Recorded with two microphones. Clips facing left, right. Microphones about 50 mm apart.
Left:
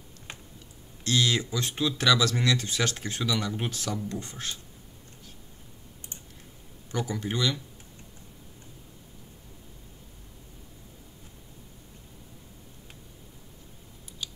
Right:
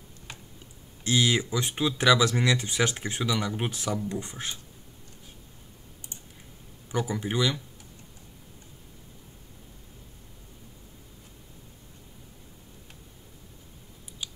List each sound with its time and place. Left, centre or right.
1.0 s speech: centre
6.9 s speech: centre
14.2 s scissors: centre